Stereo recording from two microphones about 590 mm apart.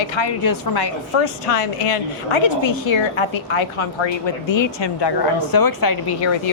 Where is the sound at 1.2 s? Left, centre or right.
Left.